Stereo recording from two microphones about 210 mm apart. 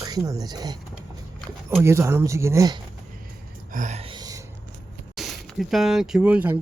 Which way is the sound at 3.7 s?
35° right (ahead or behind).